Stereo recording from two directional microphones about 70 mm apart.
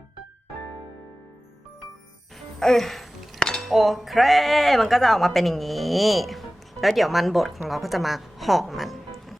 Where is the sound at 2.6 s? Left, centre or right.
Centre.